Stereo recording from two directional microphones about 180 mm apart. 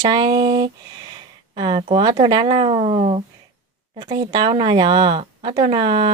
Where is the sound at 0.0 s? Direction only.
25° right (ahead or behind).